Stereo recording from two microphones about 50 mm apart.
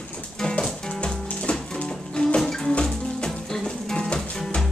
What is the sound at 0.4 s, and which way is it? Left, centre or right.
Music, centre.